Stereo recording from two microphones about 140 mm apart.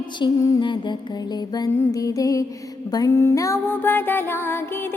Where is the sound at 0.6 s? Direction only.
35° left (ahead or behind); by 4.9 s 15° left (ahead or behind).